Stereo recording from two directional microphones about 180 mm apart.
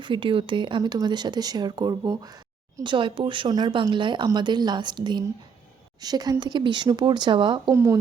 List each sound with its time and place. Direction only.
0.0 s speech: 25° right (ahead or behind)
7.7 s speech: 15° right (ahead or behind)